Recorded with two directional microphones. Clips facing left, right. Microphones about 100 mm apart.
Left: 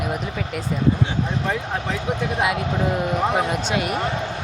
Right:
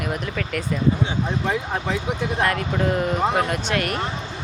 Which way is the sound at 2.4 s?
10° left (ahead or behind).